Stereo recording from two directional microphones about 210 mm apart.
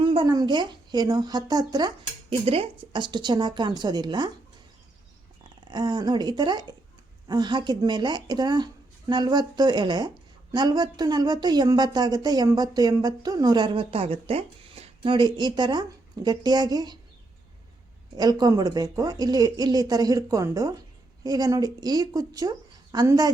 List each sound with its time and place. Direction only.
0.0 s a woman's voice: 25° right (ahead or behind)
5.4 s a woman's voice: 20° right (ahead or behind)
18.2 s speech: 20° right (ahead or behind)